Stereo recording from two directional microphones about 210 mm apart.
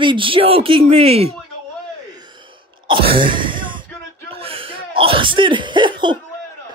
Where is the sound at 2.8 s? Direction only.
25° right (ahead or behind).